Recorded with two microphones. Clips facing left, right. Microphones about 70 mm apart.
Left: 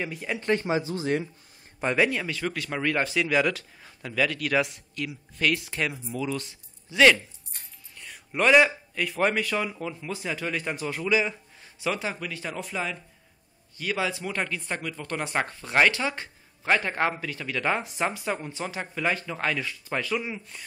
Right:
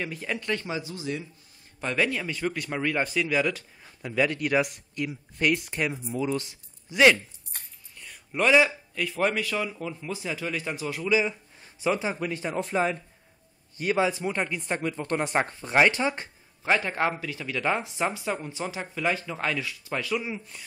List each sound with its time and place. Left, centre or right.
0.0 s speech: centre
0.4 s speech: left
2.0 s speech: centre
2.2 s speech: centre
4.0 s speech: centre
8.0 s a man's voice: centre
11.6 s speech: right
14.8 s speech: right
16.6 s speech: centre